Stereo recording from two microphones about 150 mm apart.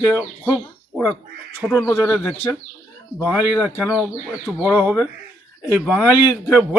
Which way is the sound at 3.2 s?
10° right (ahead or behind).